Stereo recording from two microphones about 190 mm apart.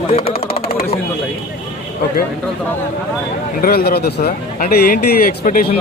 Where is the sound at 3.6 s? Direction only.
55° left (ahead or behind).